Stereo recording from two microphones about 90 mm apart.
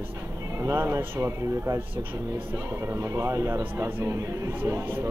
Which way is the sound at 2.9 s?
35° right (ahead or behind).